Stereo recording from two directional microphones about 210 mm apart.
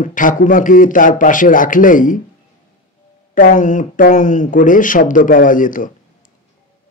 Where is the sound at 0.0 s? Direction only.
40° left (ahead or behind).